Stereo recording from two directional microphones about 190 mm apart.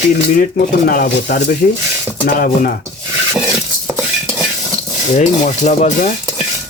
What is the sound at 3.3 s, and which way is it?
Dishes, centre (ahead or behind).